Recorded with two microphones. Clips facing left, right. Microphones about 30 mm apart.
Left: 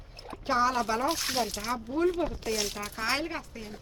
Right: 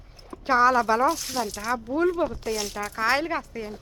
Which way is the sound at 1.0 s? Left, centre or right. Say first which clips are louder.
Right 4 dB; left.